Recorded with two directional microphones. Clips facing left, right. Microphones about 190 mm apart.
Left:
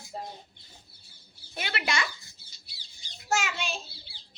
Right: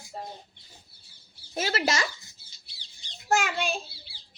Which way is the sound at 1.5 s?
40° right (ahead or behind).